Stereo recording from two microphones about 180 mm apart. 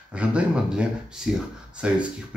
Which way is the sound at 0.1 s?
5° right (ahead or behind).